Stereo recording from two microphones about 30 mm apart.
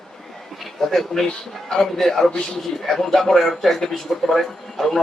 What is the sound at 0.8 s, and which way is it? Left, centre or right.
A man's voice, centre.